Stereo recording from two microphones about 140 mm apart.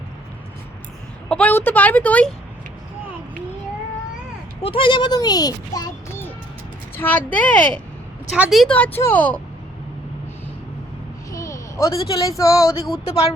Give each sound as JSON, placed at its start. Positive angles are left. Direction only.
{"t": 1.3, "sound": "a woman's voice", "side_deg": 10}
{"t": 4.6, "sound": "speech", "side_deg": 40}
{"t": 6.9, "sound": "a woman's voice", "side_deg": 15}
{"t": 8.3, "sound": "speech", "side_deg": 0}
{"t": 8.7, "sound": "a woman's voice", "side_deg": 10}
{"t": 11.3, "sound": "a sound", "side_deg": 25}
{"t": 12.4, "sound": "speech", "side_deg": 25}
{"t": 13.1, "sound": "speech", "side_deg": 45}